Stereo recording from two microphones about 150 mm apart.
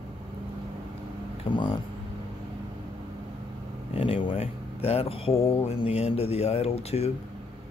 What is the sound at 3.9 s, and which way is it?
Speech, 40° left (ahead or behind).